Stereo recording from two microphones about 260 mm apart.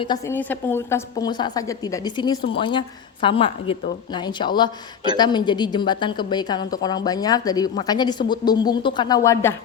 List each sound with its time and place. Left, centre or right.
0.0 s a woman's voice: centre